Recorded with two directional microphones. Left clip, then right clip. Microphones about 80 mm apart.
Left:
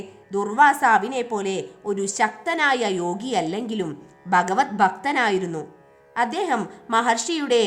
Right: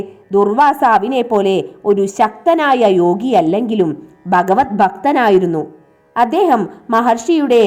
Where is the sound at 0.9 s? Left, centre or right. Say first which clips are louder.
Right 7 dB; right.